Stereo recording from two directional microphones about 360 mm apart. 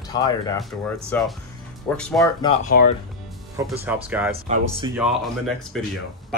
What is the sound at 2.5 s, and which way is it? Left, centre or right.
Speech, left.